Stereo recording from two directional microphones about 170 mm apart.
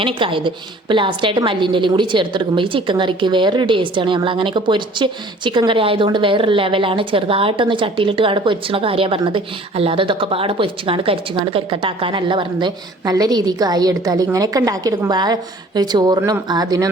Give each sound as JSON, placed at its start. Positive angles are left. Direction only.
{"t": 0.0, "sound": "a woman's voice", "side_deg": -30}